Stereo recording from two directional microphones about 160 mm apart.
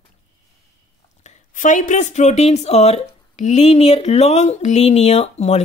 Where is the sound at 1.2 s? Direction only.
50° left (ahead or behind).